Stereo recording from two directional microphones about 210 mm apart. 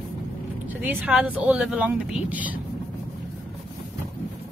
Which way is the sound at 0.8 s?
5° right (ahead or behind).